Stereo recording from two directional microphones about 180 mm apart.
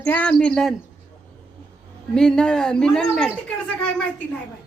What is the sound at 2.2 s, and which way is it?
Speech, 5° left (ahead or behind).